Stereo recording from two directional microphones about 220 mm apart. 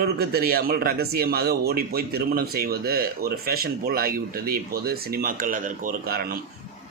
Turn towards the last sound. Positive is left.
turn(degrees=-45)  # may be behind; listen again after turning